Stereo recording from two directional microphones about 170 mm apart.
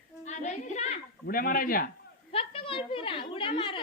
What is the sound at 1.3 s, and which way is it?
Speech, 60° left (ahead or behind).